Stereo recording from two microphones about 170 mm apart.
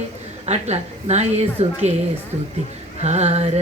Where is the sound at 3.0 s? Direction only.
40° right (ahead or behind).